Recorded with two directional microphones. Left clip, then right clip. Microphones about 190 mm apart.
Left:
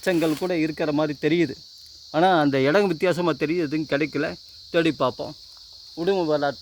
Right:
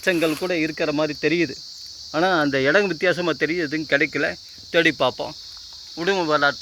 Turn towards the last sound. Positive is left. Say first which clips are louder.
# right 3 dB
turn(degrees=30)  # may be behind; listen again after turning